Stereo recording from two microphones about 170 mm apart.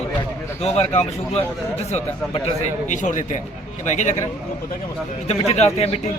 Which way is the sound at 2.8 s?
45° left (ahead or behind).